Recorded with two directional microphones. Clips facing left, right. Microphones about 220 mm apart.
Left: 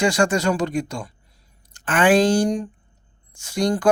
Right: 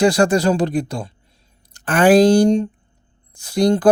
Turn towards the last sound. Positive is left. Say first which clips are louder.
# right 5 dB
turn(degrees=-35)  # may be behind; listen again after turning